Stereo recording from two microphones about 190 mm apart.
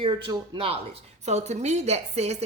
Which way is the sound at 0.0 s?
25° right (ahead or behind).